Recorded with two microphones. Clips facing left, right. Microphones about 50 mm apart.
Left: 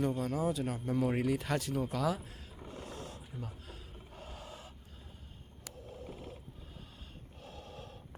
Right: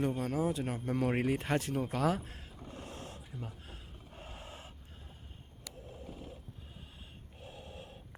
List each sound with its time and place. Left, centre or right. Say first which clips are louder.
0.2 s speech: even; right
0.9 s speech: even; right
1.2 s speech: right 1 dB; right
2.7 s roaring cats: left 1 dB; right
3.4 s gasp: even; right
7.4 s snort: even; right